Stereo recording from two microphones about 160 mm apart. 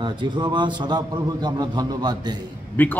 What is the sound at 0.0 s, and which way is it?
Speech, 30° right (ahead or behind).